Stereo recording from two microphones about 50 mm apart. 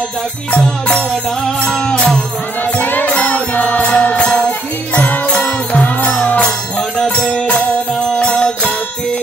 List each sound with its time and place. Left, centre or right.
1.7 s music: centre
2.8 s music: left
4.5 s music: left